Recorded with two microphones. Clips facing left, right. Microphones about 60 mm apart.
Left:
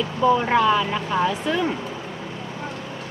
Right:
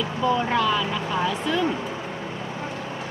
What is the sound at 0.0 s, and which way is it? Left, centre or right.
Speech, centre.